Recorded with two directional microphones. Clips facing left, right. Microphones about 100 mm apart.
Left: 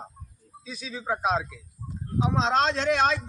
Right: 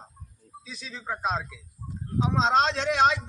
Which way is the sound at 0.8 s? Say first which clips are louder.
Left 3 dB; 10° left (ahead or behind).